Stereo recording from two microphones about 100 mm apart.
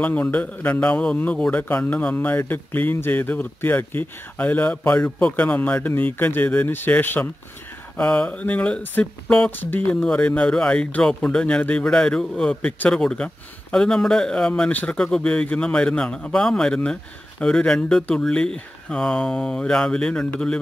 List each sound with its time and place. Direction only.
0.0 s a man's voice: 15° left (ahead or behind)